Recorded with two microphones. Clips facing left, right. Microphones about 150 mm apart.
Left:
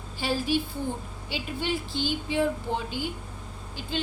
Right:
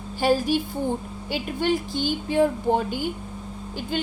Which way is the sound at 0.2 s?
45° right (ahead or behind).